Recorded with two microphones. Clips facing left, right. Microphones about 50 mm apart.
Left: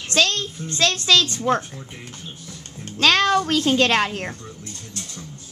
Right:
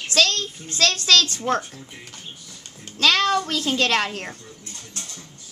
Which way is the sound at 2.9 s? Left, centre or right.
Left.